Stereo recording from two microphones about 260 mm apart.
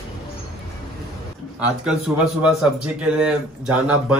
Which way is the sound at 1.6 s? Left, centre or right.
Centre.